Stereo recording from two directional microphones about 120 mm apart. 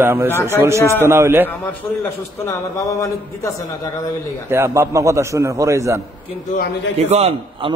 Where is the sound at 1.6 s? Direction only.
15° left (ahead or behind).